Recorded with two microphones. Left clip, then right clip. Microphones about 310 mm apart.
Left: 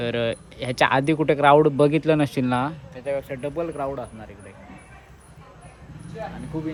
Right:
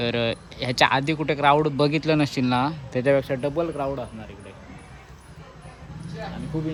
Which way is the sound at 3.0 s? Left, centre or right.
Right.